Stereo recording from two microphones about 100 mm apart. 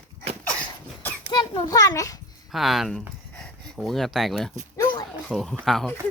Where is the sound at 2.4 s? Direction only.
Centre (ahead or behind).